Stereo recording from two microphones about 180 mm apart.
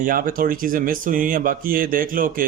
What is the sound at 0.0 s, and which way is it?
Speech, 50° right (ahead or behind).